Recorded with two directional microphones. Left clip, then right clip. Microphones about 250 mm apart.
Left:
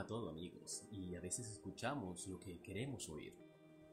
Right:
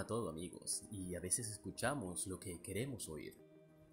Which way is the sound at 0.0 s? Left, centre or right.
Centre.